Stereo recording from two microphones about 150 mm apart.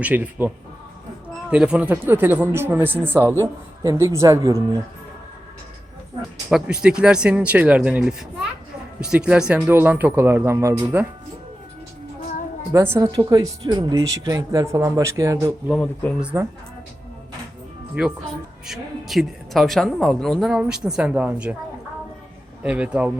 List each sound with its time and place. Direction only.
0.0 s speech: 10° right (ahead or behind)
6.5 s speech: 5° right (ahead or behind)
12.7 s speech: 20° right (ahead or behind)
13.1 s a woman's voice: 35° right (ahead or behind)
15.7 s speech: 10° left (ahead or behind)
16.2 s speech: 20° right (ahead or behind)
18.0 s speech: 10° right (ahead or behind)
22.6 s speech: 5° right (ahead or behind)